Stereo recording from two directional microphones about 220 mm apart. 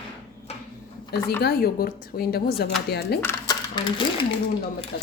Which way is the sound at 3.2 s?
15° left (ahead or behind).